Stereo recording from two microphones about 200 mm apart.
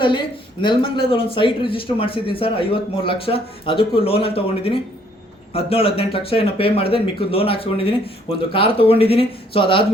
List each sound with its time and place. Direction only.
0.6 s speech: 25° left (ahead or behind)